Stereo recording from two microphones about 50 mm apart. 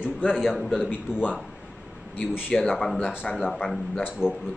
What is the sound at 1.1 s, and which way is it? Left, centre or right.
Speech, centre.